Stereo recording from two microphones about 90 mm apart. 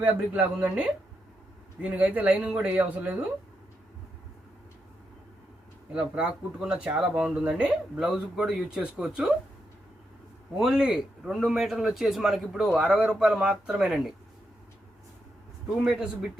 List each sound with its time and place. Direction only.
0.0 s speech: 20° right (ahead or behind)
5.9 s speech: 10° right (ahead or behind)
10.6 s a man's voice: 5° right (ahead or behind)
15.8 s speech: 5° right (ahead or behind)